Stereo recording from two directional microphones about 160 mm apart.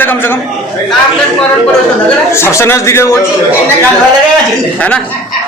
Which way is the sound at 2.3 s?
15° left (ahead or behind).